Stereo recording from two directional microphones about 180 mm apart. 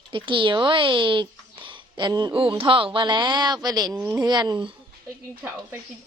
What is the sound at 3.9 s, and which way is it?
Speech, 10° right (ahead or behind).